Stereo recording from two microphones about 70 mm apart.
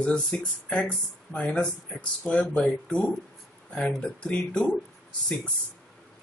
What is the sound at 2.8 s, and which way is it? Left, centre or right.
Speech, centre.